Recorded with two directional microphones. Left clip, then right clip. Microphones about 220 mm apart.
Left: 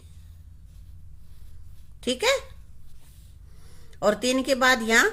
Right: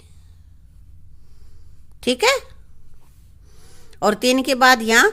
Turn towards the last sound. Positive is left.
turn(degrees=-40)  # may be behind; listen again after turning